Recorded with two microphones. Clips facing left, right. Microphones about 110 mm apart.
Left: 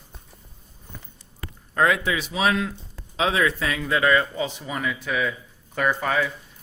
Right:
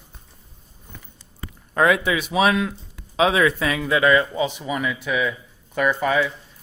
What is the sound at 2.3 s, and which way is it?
Speech, 65° right (ahead or behind).